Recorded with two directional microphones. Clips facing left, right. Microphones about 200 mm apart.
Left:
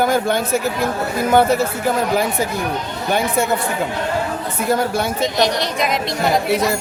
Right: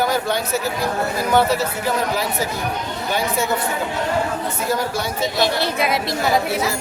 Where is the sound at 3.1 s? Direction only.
55° left (ahead or behind).